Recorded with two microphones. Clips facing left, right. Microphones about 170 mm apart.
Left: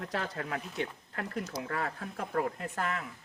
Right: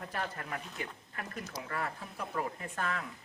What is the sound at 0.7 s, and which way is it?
Speech, 75° left (ahead or behind).